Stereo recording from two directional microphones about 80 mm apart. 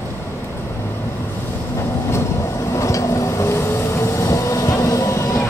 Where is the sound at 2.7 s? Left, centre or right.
Left.